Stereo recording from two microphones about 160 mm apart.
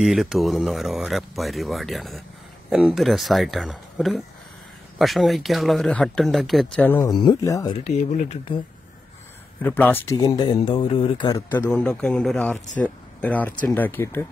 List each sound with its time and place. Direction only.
0.0 s speech: centre (ahead or behind)
7.1 s speech: 25° left (ahead or behind)
9.6 s speech: 10° left (ahead or behind)
11.6 s speech: 5° left (ahead or behind)